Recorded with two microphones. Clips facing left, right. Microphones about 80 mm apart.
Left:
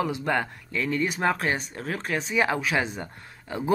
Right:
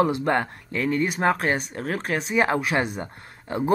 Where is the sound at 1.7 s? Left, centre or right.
Right.